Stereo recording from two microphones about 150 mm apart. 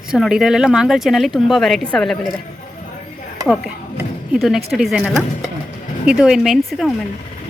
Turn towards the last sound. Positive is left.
turn(degrees=-5)  # may be behind; listen again after turning